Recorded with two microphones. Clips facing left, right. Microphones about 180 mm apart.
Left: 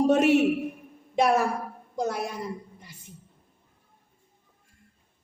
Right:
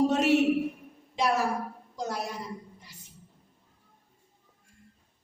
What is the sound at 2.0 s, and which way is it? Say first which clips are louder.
Speech: left 5 dB; 55° left (ahead or behind).